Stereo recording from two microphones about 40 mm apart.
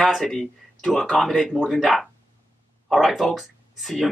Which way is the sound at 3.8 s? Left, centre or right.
Centre.